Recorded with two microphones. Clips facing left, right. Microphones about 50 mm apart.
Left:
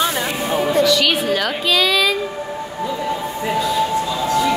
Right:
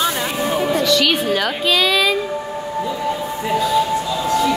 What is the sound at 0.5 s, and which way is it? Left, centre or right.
A woman's voice, centre.